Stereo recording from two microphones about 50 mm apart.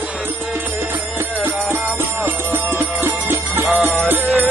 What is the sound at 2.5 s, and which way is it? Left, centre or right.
Music, right.